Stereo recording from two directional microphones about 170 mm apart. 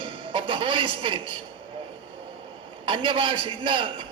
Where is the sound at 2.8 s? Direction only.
30° right (ahead or behind).